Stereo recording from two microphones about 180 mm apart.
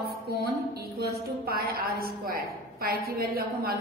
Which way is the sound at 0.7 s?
60° right (ahead or behind).